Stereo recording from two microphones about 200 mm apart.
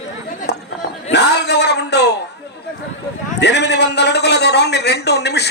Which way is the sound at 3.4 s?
60° left (ahead or behind).